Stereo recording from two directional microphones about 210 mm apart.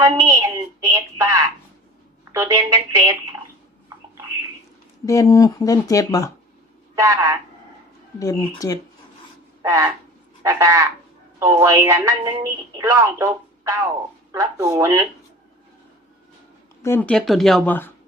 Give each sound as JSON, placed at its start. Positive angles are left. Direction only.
{"t": 0.0, "sound": "speech", "side_deg": -15}
{"t": 5.0, "sound": "speech", "side_deg": 15}
{"t": 6.9, "sound": "speech", "side_deg": -15}
{"t": 8.2, "sound": "speech", "side_deg": 15}
{"t": 9.6, "sound": "a sound", "side_deg": -15}
{"t": 10.4, "sound": "speech", "side_deg": -15}
{"t": 16.8, "sound": "speech", "side_deg": 10}